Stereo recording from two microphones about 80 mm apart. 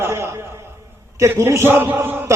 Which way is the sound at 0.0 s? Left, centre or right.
Right.